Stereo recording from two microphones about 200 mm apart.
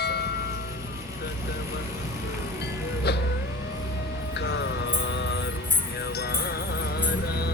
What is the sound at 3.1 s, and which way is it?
Vehicle, 55° left (ahead or behind).